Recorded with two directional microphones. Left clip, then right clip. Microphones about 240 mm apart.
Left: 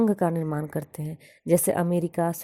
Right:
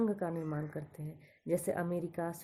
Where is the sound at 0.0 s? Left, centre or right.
Left.